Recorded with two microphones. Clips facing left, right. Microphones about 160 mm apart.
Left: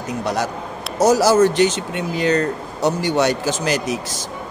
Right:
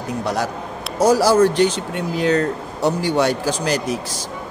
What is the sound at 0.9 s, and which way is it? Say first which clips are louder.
A man's voice: even; 5° left (ahead or behind).